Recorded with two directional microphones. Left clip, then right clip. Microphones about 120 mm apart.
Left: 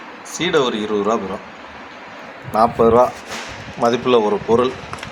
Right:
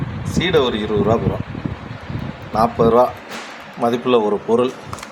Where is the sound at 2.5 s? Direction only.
5° left (ahead or behind).